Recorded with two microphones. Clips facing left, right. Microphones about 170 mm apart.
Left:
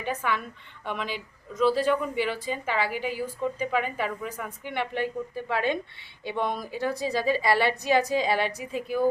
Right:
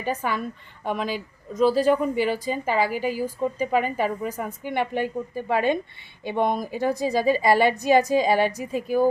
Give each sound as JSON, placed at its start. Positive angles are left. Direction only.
{"t": 0.0, "sound": "a woman's voice", "side_deg": -40}